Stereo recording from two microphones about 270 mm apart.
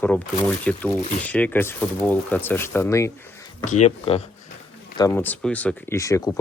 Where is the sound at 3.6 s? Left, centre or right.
Left.